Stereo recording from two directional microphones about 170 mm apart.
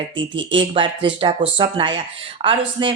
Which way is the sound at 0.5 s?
30° right (ahead or behind).